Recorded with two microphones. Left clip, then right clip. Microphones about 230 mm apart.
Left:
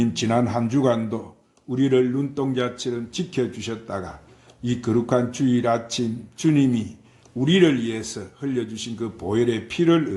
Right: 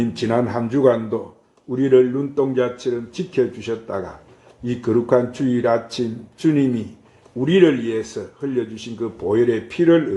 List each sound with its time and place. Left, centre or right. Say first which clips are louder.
0.0 s speech: right 2 dB; left